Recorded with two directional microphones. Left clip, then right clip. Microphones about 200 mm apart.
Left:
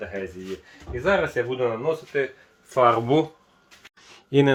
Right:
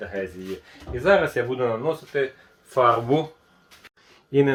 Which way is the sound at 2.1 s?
20° left (ahead or behind).